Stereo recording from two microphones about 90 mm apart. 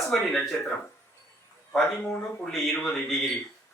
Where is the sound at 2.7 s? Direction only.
15° left (ahead or behind).